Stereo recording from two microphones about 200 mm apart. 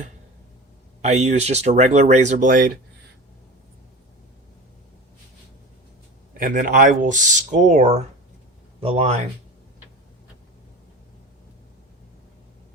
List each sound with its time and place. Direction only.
1.0 s speech: 35° right (ahead or behind)
6.3 s speech: 45° right (ahead or behind)